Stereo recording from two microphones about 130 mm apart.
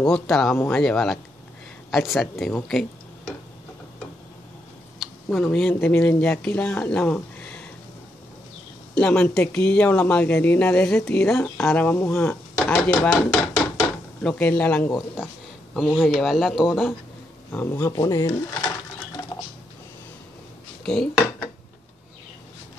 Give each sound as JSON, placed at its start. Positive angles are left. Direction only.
{"t": 0.0, "sound": "speech", "side_deg": 5}
{"t": 5.0, "sound": "speech", "side_deg": 5}
{"t": 8.9, "sound": "speech", "side_deg": 5}
{"t": 12.7, "sound": "chopping", "side_deg": 15}
{"t": 14.2, "sound": "speech", "side_deg": 10}
{"t": 17.5, "sound": "speech", "side_deg": 20}
{"t": 18.0, "sound": "dishes", "side_deg": 25}
{"t": 20.8, "sound": "speech", "side_deg": 5}